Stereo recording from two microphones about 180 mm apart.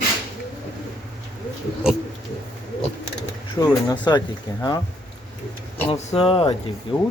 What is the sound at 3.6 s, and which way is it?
Speech, 25° left (ahead or behind).